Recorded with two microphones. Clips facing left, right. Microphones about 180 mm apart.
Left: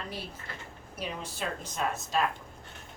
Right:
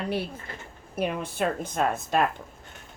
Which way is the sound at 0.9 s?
55° right (ahead or behind).